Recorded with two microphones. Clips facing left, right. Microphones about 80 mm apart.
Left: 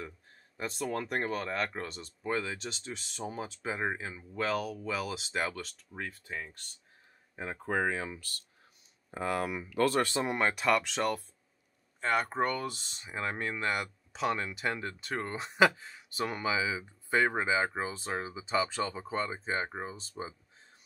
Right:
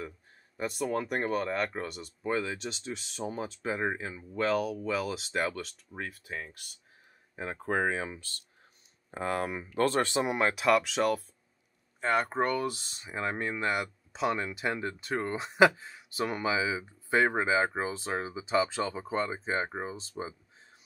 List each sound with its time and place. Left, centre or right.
0.6 s speech: centre; by 10.1 s right
10.1 s speech: centre